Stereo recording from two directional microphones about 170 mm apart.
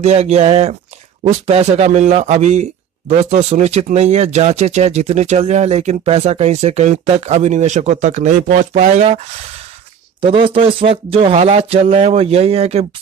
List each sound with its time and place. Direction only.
0.0 s a man's voice: 40° right (ahead or behind)
10.2 s a man's voice: 30° right (ahead or behind)